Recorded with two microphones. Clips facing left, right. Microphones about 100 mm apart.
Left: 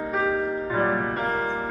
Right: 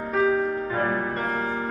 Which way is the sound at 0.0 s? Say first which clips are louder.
Right 2 dB; 10° left (ahead or behind).